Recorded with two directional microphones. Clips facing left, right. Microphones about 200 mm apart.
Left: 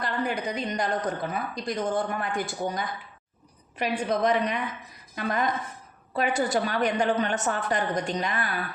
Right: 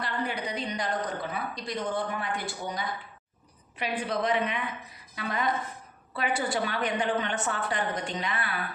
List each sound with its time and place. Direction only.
0.0 s a woman's voice: 45° left (ahead or behind)